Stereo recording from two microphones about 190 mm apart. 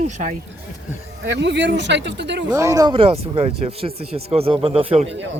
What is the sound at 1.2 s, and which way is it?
Speech, 70° right (ahead or behind).